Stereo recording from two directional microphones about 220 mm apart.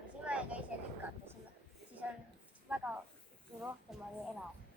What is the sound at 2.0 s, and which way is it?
Speech, 5° right (ahead or behind).